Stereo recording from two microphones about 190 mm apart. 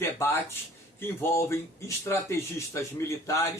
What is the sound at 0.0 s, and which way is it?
Speech, 15° left (ahead or behind).